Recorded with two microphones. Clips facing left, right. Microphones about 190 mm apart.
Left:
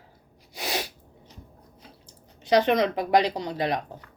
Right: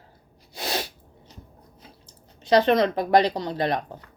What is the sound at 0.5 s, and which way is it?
Sneeze, 15° left (ahead or behind).